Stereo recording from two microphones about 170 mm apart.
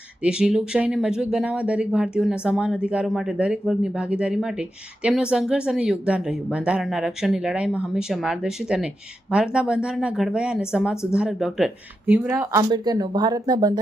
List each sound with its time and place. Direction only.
0.2 s speech: 5° right (ahead or behind)
12.5 s speech: 20° right (ahead or behind)